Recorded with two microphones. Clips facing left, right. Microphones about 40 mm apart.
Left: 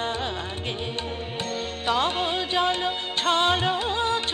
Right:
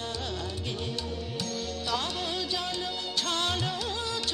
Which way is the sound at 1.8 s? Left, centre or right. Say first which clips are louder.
Left 9 dB; left.